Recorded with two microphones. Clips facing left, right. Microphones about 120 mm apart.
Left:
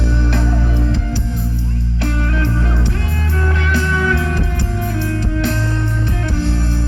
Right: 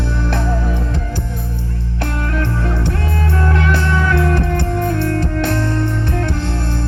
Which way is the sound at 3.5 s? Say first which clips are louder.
Even; 60° right (ahead or behind).